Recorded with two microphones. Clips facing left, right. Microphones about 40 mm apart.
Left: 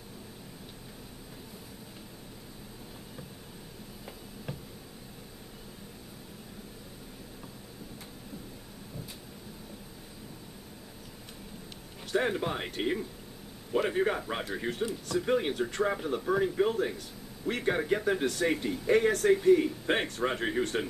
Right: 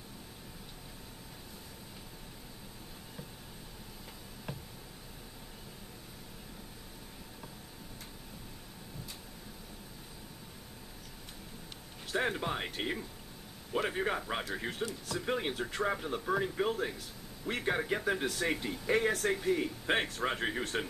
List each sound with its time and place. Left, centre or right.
12.1 s speech: centre